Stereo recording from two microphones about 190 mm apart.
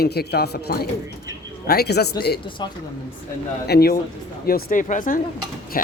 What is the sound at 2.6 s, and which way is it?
Speech, 25° left (ahead or behind).